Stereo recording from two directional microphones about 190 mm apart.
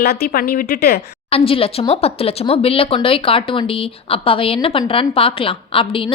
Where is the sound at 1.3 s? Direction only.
30° left (ahead or behind).